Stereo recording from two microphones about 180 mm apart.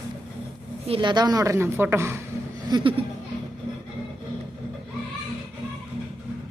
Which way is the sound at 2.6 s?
25° right (ahead or behind).